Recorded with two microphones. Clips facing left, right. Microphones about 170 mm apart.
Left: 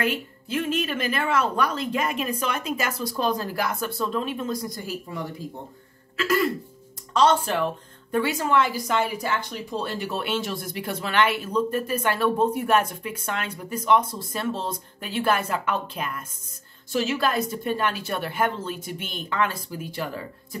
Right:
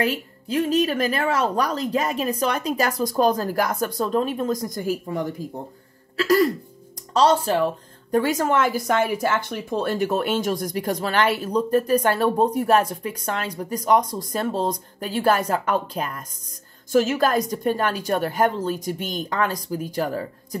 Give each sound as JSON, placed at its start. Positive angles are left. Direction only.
{"t": 0.0, "sound": "a woman's voice", "side_deg": -40}